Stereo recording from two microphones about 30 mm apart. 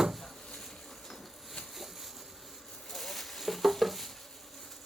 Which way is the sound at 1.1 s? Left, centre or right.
Centre.